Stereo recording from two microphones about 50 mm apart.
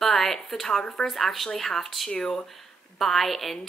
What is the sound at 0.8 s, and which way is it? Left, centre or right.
A woman's voice, centre.